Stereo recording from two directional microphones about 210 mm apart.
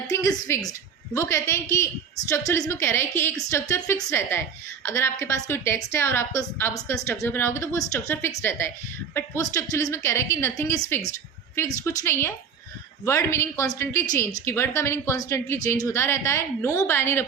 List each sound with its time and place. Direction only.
0.1 s a woman's voice: 15° left (ahead or behind)